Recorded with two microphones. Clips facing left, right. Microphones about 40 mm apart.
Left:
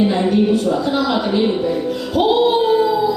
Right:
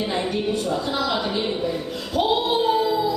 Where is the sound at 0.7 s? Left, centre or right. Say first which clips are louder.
Left 6 dB; centre.